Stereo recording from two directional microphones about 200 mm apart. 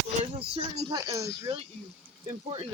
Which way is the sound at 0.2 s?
25° right (ahead or behind).